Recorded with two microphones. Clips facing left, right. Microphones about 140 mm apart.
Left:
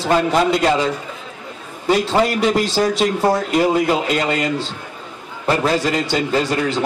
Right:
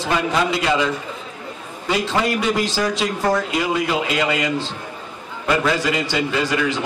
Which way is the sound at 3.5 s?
40° left (ahead or behind).